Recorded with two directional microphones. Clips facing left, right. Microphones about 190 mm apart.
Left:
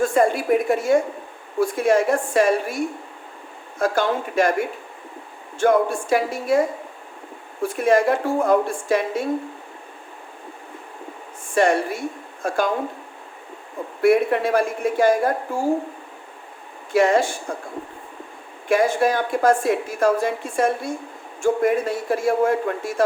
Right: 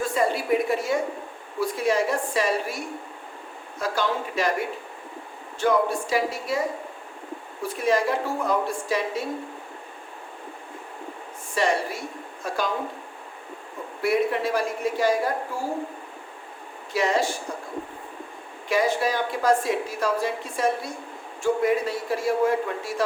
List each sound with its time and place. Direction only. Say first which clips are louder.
0.0 s a woman's voice: left 6 dB; 50° left (ahead or behind)
3.8 s a woman's voice: left 5 dB; 50° left (ahead or behind)
5.5 s a woman's voice: left 4 dB; 50° left (ahead or behind)
7.6 s a woman's voice: left 5 dB; 50° left (ahead or behind)
11.5 s a woman's voice: left 6 dB; 55° left (ahead or behind)
14.0 s a woman's voice: left 6 dB; 55° left (ahead or behind)
16.9 s a woman's voice: left 6 dB; 50° left (ahead or behind)
18.7 s a woman's voice: left 5 dB; 50° left (ahead or behind)